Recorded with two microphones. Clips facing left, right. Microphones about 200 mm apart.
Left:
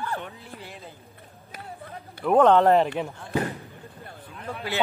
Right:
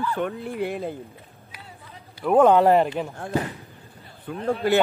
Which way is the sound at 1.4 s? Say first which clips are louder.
Left 8 dB; 50° left (ahead or behind).